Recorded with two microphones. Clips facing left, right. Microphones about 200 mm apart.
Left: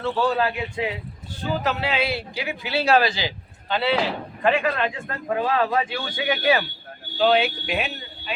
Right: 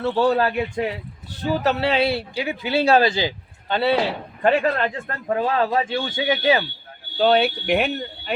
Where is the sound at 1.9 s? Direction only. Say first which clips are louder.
Right 5 dB; 30° right (ahead or behind).